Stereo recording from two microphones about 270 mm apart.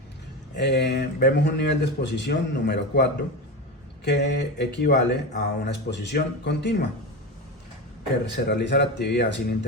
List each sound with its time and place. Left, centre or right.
0.5 s speech: left
8.4 s speech: left